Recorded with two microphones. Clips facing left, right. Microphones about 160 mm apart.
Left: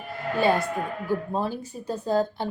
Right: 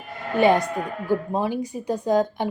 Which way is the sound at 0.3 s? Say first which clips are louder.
Right 5 dB; 20° right (ahead or behind).